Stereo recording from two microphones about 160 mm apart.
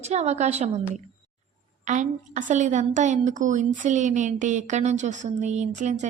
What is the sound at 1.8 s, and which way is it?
A woman's voice, 50° right (ahead or behind).